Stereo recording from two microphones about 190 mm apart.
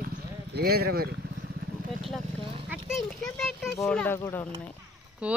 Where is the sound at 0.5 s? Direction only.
55° right (ahead or behind).